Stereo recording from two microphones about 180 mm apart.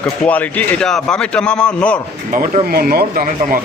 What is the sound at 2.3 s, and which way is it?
Speech, 50° right (ahead or behind).